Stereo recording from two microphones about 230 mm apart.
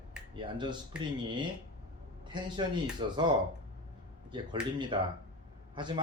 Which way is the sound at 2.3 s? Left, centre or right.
Centre.